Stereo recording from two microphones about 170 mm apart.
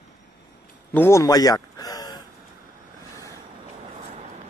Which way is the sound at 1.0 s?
15° left (ahead or behind).